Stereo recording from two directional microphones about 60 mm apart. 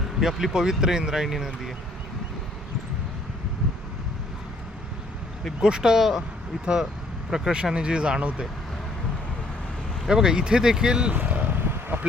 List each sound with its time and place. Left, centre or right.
0.2 s speech: centre
5.5 s speech: centre
7.3 s speech: centre
10.1 s speech: centre
11.1 s vehicle: right